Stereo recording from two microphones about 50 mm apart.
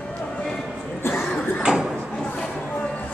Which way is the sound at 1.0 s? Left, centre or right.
Left.